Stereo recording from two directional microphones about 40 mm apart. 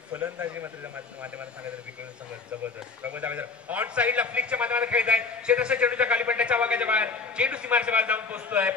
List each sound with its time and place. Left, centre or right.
0.1 s a man's voice: right
3.1 s a man's voice: right